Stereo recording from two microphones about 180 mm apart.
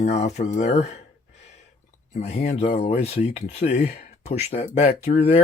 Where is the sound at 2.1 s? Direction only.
40° left (ahead or behind).